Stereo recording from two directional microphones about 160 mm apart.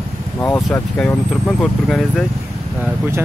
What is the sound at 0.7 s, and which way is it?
Speech, 5° left (ahead or behind).